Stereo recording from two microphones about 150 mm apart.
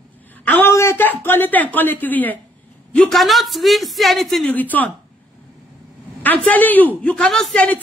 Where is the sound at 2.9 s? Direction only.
Centre (ahead or behind).